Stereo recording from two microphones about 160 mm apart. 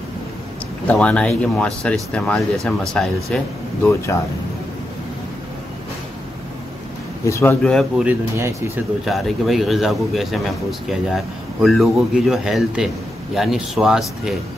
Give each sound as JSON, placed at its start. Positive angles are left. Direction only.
{"t": 0.8, "sound": "speech", "side_deg": 5}
{"t": 3.8, "sound": "speech", "side_deg": 15}
{"t": 7.2, "sound": "speech", "side_deg": 15}
{"t": 8.0, "sound": "speech", "side_deg": -15}
{"t": 9.0, "sound": "a man's voice", "side_deg": 0}